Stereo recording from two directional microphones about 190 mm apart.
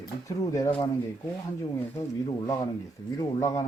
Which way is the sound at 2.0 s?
20° left (ahead or behind).